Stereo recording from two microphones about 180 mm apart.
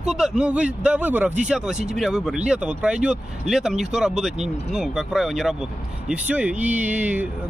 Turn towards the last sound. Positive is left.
turn(degrees=-10)  # may be behind; listen again after turning